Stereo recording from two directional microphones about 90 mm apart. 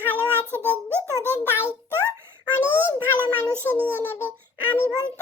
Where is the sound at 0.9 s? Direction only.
25° right (ahead or behind).